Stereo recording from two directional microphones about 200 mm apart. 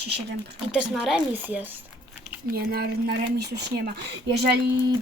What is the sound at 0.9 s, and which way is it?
Speech, centre (ahead or behind).